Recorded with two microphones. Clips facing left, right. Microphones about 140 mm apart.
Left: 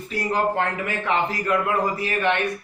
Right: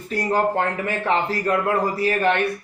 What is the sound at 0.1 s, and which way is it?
A man's voice, 40° right (ahead or behind).